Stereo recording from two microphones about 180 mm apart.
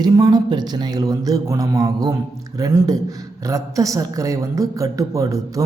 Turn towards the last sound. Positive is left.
turn(degrees=-20)  # may be behind; listen again after turning